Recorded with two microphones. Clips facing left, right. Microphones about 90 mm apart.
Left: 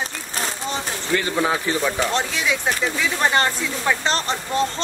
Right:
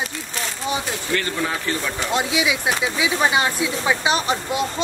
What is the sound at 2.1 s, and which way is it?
Speech, 5° right (ahead or behind).